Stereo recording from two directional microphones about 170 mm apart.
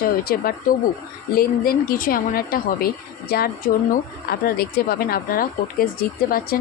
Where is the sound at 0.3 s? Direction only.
60° left (ahead or behind).